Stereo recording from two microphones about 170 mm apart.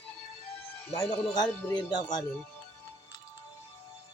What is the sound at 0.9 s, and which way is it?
Music, 25° left (ahead or behind).